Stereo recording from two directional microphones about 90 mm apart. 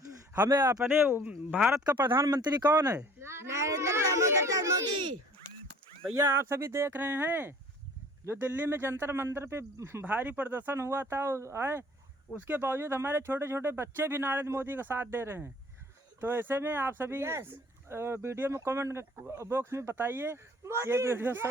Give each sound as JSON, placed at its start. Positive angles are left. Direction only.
{"t": 0.5, "sound": "speech", "side_deg": -50}
{"t": 0.9, "sound": "speech", "side_deg": -25}
{"t": 1.7, "sound": "speech", "side_deg": -50}
{"t": 3.2, "sound": "a sound", "side_deg": -30}
{"t": 6.1, "sound": "speech", "side_deg": -35}